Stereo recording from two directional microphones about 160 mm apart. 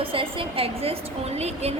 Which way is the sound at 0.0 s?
35° right (ahead or behind).